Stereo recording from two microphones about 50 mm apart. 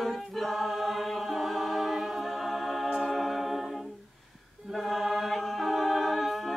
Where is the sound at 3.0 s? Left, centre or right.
Centre.